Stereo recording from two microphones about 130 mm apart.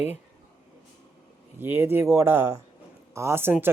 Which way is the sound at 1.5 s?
15° right (ahead or behind).